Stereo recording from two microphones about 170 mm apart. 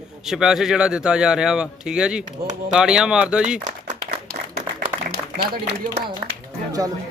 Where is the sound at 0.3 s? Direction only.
5° right (ahead or behind).